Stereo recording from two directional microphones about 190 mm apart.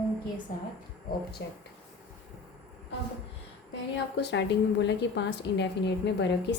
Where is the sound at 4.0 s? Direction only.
65° left (ahead or behind).